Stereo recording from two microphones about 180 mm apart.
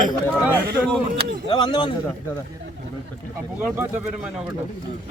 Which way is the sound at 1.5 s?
25° left (ahead or behind).